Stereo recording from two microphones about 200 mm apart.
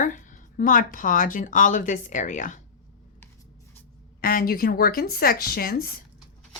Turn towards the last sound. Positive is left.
turn(degrees=45)  # may be behind; listen again after turning